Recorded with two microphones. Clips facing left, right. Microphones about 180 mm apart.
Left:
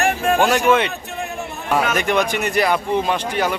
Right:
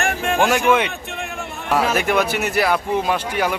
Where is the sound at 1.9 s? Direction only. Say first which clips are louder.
Even; 5° right (ahead or behind).